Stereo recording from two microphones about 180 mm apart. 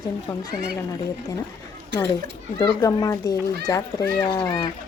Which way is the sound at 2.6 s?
15° left (ahead or behind).